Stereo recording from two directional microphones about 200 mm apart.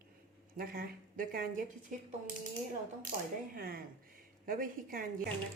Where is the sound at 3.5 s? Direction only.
50° right (ahead or behind).